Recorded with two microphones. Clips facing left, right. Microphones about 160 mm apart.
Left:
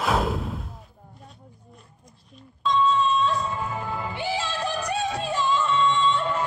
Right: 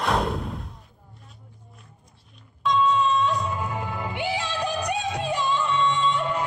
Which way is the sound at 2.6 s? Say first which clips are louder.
Even; 15° right (ahead or behind).